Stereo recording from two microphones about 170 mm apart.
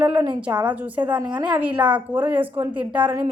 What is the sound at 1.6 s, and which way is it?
A woman's voice, 10° right (ahead or behind).